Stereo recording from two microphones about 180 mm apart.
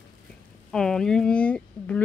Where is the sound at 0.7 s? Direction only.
5° left (ahead or behind).